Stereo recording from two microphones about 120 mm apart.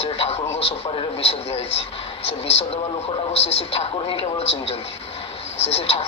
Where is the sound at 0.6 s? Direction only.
55° left (ahead or behind).